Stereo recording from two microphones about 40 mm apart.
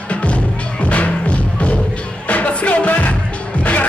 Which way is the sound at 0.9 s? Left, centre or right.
Left.